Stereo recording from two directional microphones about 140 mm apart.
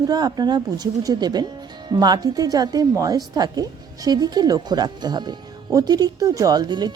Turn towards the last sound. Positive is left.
turn(degrees=-30)  # may be behind; listen again after turning